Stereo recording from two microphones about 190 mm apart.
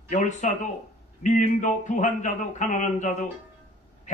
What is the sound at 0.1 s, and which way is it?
Speech, 40° left (ahead or behind).